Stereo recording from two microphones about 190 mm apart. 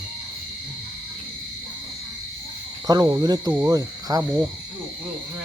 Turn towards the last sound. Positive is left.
turn(degrees=-20)  # may be behind; listen again after turning